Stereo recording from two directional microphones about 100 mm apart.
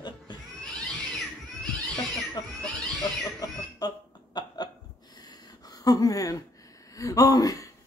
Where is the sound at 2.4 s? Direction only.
40° left (ahead or behind).